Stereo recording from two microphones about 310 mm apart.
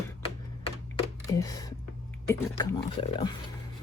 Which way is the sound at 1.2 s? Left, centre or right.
Centre.